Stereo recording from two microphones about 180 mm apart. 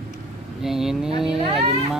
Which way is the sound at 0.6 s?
Centre (ahead or behind).